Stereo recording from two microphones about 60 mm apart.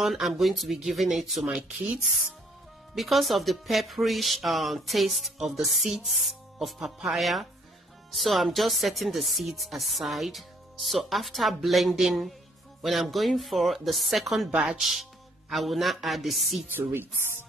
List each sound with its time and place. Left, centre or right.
0.0 s speech: centre
14.5 s speech: centre
14.8 s speech: centre
16.7 s speech: right